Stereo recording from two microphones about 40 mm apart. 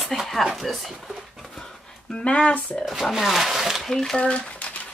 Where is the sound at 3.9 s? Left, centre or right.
Centre.